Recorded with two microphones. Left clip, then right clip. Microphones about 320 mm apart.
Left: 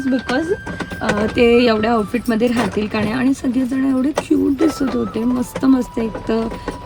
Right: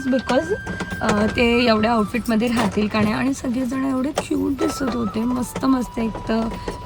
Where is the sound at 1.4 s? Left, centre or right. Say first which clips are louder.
Left 6 dB; centre.